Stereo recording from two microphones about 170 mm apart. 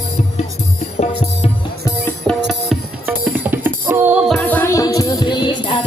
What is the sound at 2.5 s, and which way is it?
Music, centre (ahead or behind).